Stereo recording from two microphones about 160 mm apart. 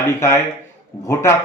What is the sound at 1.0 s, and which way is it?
Speech, 15° left (ahead or behind).